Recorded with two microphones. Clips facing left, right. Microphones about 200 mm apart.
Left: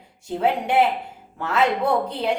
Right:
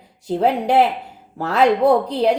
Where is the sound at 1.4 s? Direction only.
35° right (ahead or behind).